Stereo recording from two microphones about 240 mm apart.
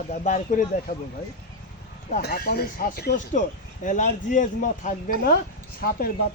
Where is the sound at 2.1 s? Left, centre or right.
Left.